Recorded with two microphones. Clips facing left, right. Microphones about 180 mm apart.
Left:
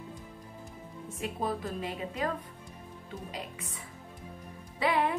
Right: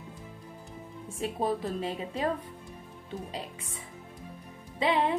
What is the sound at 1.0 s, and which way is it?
Speech, 30° right (ahead or behind).